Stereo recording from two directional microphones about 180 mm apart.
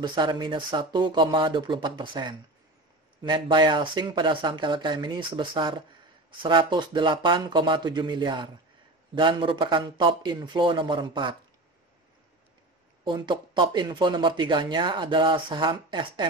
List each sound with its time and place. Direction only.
0.0 s speech: 25° right (ahead or behind)
13.0 s speech: 25° right (ahead or behind)